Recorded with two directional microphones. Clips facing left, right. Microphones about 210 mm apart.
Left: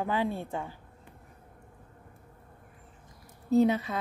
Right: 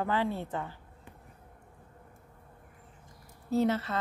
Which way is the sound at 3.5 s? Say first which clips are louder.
Left 4 dB; 15° left (ahead or behind).